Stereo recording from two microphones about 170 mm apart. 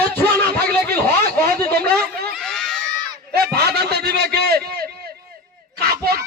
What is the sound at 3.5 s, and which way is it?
A man's voice, 70° right (ahead or behind).